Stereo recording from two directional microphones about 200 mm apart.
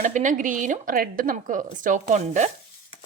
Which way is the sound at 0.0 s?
40° right (ahead or behind).